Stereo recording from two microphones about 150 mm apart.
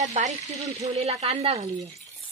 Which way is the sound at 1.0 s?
40° right (ahead or behind).